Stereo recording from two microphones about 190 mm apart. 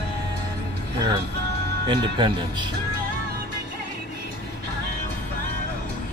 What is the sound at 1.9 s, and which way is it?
Speech, 25° right (ahead or behind).